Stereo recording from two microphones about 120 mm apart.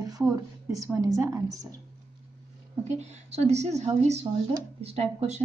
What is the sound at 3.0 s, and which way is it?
Speech, 65° right (ahead or behind).